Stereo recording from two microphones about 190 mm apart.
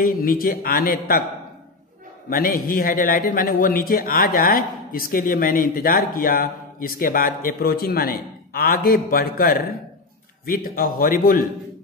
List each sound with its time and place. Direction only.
0.0 s a man's voice: 50° left (ahead or behind)
2.2 s a man's voice: 50° left (ahead or behind)